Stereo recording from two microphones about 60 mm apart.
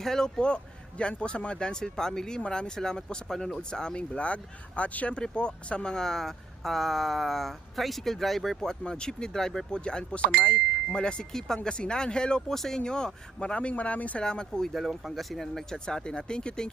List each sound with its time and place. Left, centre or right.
0.0 s speech: centre; by 14.3 s left
14.3 s speech: centre
14.7 s speech: centre